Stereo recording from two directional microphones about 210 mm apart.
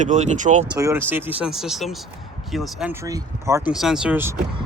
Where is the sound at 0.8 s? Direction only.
10° right (ahead or behind).